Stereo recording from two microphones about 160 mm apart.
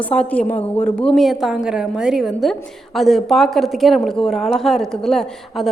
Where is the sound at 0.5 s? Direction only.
45° left (ahead or behind).